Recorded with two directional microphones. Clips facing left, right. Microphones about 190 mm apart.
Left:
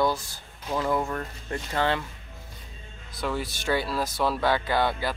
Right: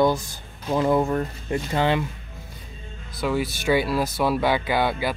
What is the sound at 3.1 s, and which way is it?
Speech, 10° right (ahead or behind).